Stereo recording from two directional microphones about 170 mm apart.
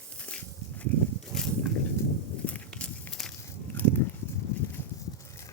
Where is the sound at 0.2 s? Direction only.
5° left (ahead or behind).